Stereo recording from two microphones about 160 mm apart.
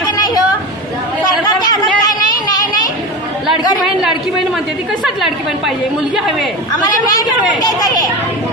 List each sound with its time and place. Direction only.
1.5 s chatter: 25° left (ahead or behind)
5.0 s a woman's voice: centre (ahead or behind)
6.8 s speech: 20° left (ahead or behind)